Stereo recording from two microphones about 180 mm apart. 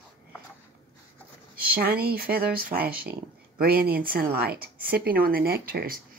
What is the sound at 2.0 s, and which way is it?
Speech, 60° right (ahead or behind).